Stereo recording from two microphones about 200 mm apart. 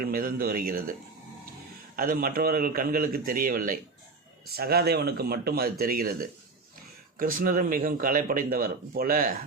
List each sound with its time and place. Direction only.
0.0 s speech: 45° right (ahead or behind)
2.0 s speech: 45° right (ahead or behind)